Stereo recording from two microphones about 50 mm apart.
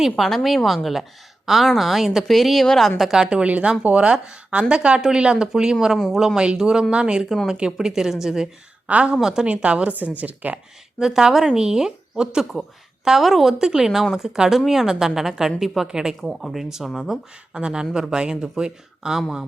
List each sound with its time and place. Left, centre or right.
0.0 s speech: centre
3.0 s a woman's voice: centre
3.2 s a woman's voice: right
8.9 s speech: right
9.2 s a woman's voice: centre
9.5 s speech: right
11.0 s a woman's voice: centre
17.5 s a woman's voice: centre